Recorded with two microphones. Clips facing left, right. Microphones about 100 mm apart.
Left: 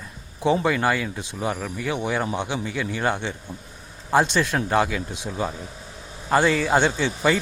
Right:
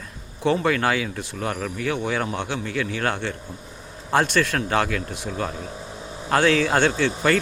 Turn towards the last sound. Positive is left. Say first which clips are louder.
# right 1 dB
turn(degrees=15)  # may be behind; listen again after turning